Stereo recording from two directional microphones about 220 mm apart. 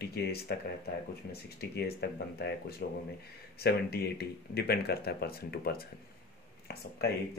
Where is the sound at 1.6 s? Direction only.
45° left (ahead or behind).